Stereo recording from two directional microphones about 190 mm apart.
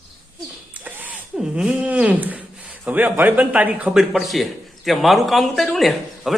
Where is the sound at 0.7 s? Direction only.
10° right (ahead or behind).